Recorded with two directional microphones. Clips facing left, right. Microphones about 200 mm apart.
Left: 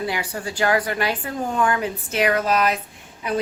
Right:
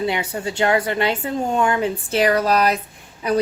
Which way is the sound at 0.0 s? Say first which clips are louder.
Right 4 dB; 25° right (ahead or behind).